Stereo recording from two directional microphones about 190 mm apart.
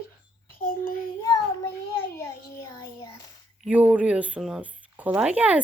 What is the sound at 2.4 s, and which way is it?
Speech, 20° left (ahead or behind).